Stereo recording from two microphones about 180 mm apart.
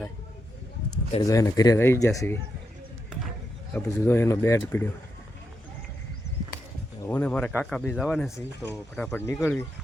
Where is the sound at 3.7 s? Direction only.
15° left (ahead or behind).